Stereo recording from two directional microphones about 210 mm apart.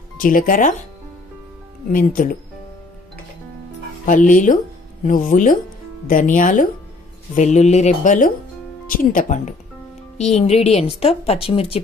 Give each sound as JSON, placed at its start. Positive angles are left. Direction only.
{"t": 0.2, "sound": "speech", "side_deg": 40}
{"t": 1.9, "sound": "speech", "side_deg": 40}
{"t": 4.0, "sound": "a woman's voice", "side_deg": 40}